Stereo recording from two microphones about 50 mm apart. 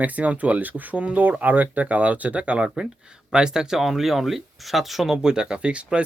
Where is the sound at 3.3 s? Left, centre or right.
Centre.